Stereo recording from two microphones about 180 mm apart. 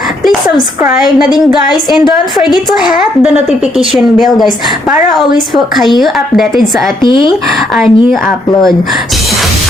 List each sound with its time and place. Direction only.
0.8 s a woman's voice: 5° right (ahead or behind)
4.9 s a woman's voice: centre (ahead or behind)
7.0 s speech: 25° left (ahead or behind)
7.8 s a woman's voice: centre (ahead or behind)